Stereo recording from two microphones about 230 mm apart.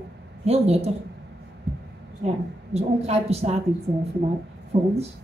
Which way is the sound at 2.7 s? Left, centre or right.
Right.